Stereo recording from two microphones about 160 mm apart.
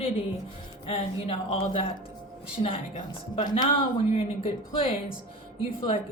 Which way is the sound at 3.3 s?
30° left (ahead or behind).